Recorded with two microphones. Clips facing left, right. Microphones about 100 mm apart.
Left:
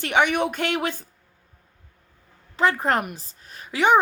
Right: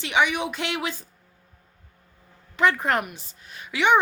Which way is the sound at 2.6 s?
35° left (ahead or behind).